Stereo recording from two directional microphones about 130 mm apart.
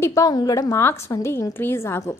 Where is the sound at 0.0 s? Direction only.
25° left (ahead or behind).